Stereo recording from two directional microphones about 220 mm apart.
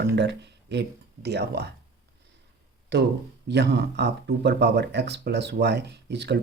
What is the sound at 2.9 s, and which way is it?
Speech, 55° right (ahead or behind).